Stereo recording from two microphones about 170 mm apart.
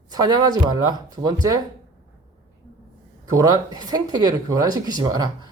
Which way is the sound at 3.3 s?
20° right (ahead or behind).